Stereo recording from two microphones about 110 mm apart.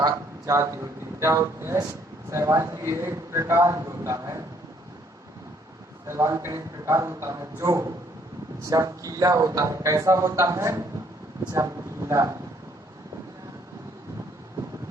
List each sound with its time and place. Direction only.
0.0 s a man's voice: 30° right (ahead or behind)
6.1 s a man's voice: 25° right (ahead or behind)